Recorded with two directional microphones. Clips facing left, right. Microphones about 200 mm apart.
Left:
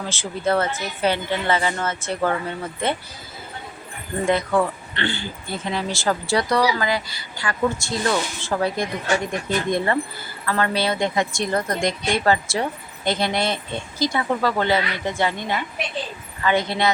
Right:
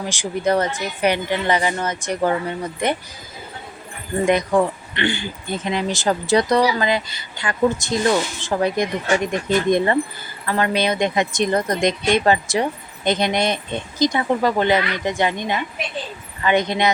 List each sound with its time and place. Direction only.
0.0 s speech: 15° right (ahead or behind)
4.3 s speech: 15° right (ahead or behind)